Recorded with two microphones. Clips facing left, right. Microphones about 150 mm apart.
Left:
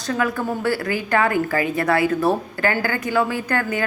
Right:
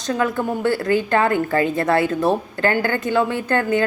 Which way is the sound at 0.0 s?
25° right (ahead or behind).